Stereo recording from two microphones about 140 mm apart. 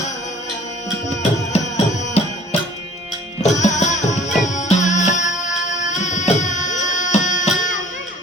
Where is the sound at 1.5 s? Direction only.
55° left (ahead or behind).